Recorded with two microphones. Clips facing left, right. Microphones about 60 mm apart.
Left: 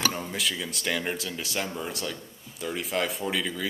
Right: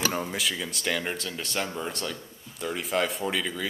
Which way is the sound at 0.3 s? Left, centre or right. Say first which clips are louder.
Even; centre.